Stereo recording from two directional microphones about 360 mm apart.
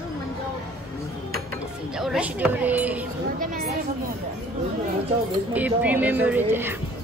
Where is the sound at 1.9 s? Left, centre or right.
Centre.